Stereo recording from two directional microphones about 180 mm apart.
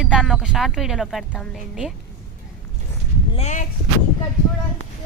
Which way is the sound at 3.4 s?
40° left (ahead or behind).